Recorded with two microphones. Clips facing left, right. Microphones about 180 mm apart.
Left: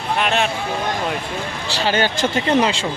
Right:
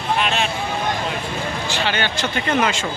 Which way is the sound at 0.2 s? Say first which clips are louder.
Left 5 dB; 55° left (ahead or behind).